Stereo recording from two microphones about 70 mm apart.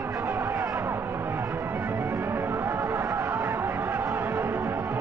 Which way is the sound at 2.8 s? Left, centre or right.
Right.